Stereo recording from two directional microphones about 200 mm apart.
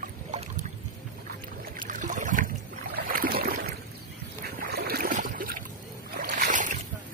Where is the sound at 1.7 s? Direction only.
40° right (ahead or behind).